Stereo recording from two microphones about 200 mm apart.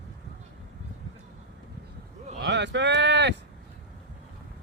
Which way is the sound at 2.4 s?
60° right (ahead or behind).